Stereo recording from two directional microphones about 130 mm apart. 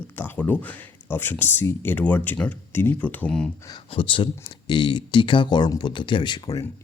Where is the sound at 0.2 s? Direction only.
15° left (ahead or behind).